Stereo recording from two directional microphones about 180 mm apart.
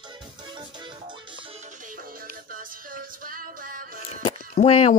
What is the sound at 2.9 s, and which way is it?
Music, 50° right (ahead or behind).